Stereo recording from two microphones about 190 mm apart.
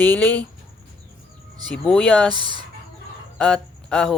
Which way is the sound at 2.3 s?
25° right (ahead or behind).